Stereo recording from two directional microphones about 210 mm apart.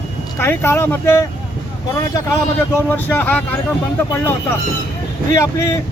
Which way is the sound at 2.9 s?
10° left (ahead or behind).